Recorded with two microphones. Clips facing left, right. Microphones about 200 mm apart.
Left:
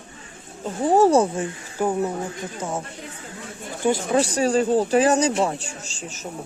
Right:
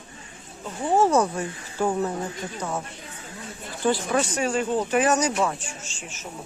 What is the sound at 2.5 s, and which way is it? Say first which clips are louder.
Speech: left 2 dB; 25° left (ahead or behind).